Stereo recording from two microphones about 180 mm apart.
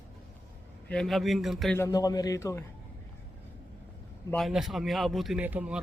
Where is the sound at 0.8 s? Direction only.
5° left (ahead or behind).